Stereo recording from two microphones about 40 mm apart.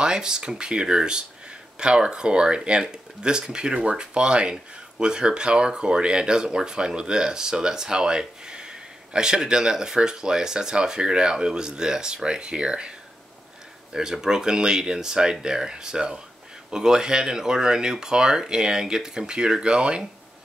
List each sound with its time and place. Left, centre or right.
0.0 s speech: centre
13.9 s speech: centre